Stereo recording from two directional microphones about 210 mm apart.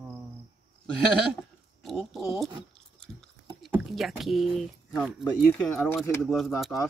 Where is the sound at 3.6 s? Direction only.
Centre (ahead or behind).